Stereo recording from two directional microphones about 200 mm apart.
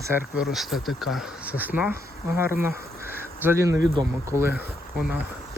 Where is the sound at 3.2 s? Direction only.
10° right (ahead or behind).